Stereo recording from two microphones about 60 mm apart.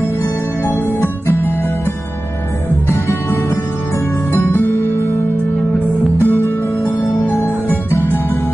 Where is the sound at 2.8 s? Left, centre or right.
Left.